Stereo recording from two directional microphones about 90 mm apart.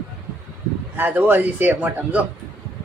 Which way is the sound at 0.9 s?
20° right (ahead or behind).